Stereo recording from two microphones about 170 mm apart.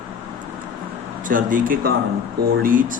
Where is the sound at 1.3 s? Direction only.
50° right (ahead or behind).